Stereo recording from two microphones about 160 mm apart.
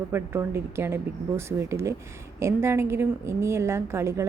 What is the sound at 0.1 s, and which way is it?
A woman's voice, 15° right (ahead or behind).